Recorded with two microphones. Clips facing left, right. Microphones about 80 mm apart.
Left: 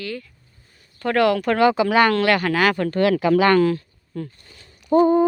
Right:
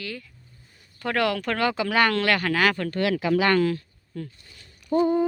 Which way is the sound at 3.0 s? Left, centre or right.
Left.